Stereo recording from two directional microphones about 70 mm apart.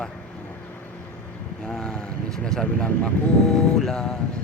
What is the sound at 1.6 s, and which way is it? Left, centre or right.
Speech, centre.